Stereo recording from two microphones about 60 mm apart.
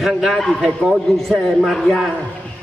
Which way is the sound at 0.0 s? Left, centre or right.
Centre.